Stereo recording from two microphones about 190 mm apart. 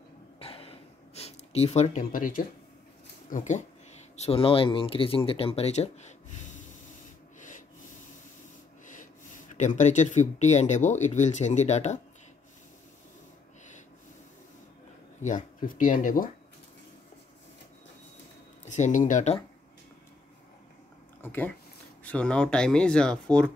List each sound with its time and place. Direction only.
0.4 s gasp: 30° left (ahead or behind); by 2.4 s 45° left (ahead or behind)
3.3 s speech: 40° left (ahead or behind)
4.2 s speech: 30° left (ahead or behind)
8.8 s speech: 45° left (ahead or behind)
15.2 s speech: 45° left (ahead or behind)
18.7 s speech: 40° left (ahead or behind)
21.2 s speech: 10° left (ahead or behind)